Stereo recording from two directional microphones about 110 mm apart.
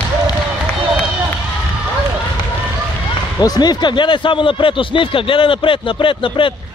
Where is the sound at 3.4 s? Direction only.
40° left (ahead or behind).